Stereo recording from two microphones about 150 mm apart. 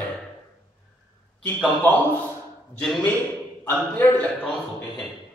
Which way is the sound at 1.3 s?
5° left (ahead or behind).